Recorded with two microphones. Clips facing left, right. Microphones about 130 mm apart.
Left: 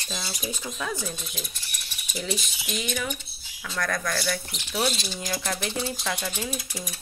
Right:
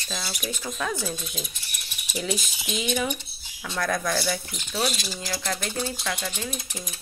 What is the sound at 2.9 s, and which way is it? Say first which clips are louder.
Speech: right 7 dB; 15° right (ahead or behind).